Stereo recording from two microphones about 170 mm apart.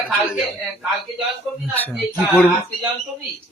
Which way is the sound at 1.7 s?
10° left (ahead or behind).